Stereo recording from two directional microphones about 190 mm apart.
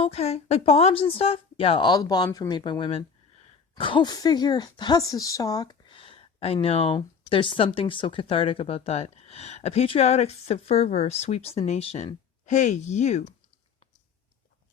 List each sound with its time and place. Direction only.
0.0 s a woman's voice: 35° left (ahead or behind)